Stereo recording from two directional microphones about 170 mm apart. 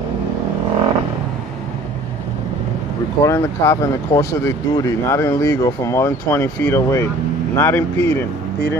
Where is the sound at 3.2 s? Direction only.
15° left (ahead or behind).